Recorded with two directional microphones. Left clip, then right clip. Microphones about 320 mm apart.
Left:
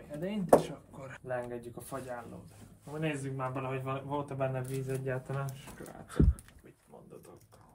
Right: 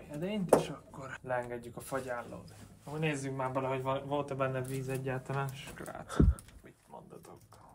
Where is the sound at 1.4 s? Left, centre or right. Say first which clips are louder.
Even; centre.